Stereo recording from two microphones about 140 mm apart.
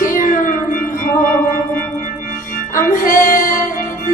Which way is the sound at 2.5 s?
75° left (ahead or behind).